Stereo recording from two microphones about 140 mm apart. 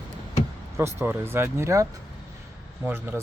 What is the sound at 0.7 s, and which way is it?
Speech, 20° right (ahead or behind).